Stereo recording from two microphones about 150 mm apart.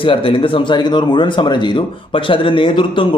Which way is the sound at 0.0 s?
35° left (ahead or behind).